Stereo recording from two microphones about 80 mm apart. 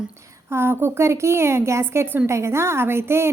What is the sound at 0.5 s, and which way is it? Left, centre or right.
A woman's voice, right.